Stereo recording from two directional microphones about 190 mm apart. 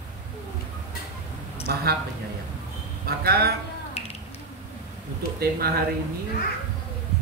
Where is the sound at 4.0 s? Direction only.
30° left (ahead or behind).